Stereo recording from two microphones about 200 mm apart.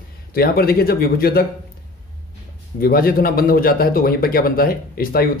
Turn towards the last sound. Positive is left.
turn(degrees=50)  # may be behind; listen again after turning